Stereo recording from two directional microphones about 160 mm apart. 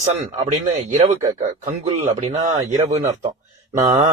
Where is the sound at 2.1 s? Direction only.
40° right (ahead or behind).